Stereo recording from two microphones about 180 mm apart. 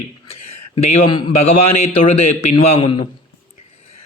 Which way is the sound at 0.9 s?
35° left (ahead or behind).